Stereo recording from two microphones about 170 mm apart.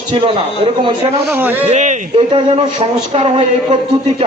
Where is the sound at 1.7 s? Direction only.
45° right (ahead or behind).